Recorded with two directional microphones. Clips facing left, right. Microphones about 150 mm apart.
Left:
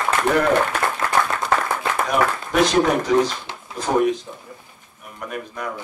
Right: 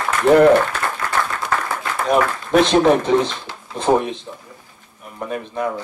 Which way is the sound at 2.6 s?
25° right (ahead or behind).